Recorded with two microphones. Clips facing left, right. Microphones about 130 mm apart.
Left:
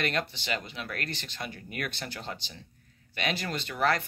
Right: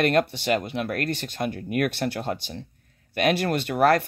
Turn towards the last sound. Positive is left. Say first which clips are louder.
# right 8 dB
turn(degrees=-55)  # may be behind; listen again after turning